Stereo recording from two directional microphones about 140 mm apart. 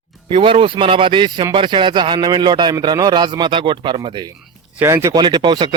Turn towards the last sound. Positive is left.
turn(degrees=-30)  # may be behind; listen again after turning